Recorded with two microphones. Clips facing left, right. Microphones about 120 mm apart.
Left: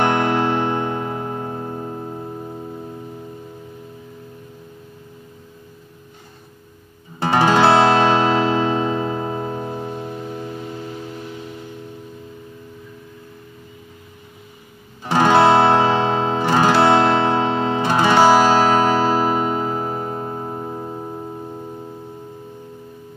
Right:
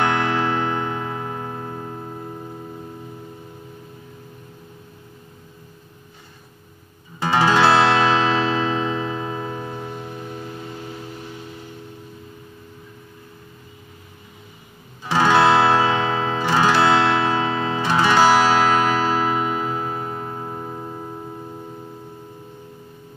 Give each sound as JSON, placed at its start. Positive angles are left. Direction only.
{"t": 0.0, "sound": "music", "side_deg": 25}
{"t": 0.9, "sound": "music", "side_deg": 35}
{"t": 7.3, "sound": "music", "side_deg": 20}
{"t": 15.1, "sound": "guitar", "side_deg": 20}